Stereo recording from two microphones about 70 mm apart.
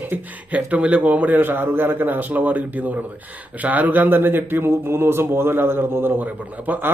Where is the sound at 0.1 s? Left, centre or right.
Right.